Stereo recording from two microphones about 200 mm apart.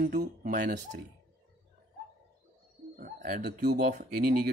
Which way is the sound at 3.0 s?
50° right (ahead or behind).